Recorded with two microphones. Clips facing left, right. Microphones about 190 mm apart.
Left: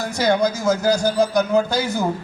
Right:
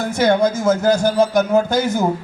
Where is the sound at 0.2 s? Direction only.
50° right (ahead or behind).